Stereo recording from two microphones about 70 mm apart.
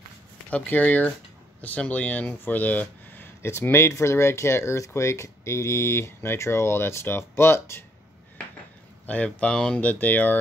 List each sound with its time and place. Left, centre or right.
0.5 s speech: left
3.4 s speech: left
9.0 s speech: centre
9.8 s speech: left